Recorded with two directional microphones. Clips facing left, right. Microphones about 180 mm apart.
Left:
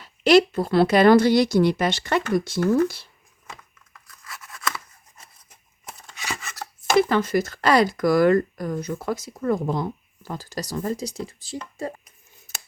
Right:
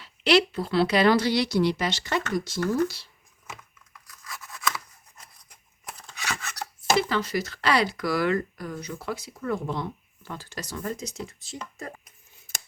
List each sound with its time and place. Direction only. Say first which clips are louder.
0.0 s speech: left 5 dB; 45° left (ahead or behind)
4.1 s a sound: even; centre (ahead or behind)
6.1 s chopping: even; centre (ahead or behind)
7.1 s speech: left 6 dB; 50° left (ahead or behind); by 11.9 s 35° left (ahead or behind)